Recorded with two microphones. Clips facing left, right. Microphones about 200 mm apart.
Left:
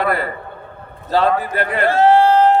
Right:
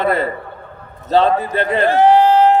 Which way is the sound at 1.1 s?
20° right (ahead or behind).